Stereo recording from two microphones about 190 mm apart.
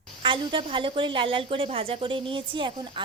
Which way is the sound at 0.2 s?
25° right (ahead or behind).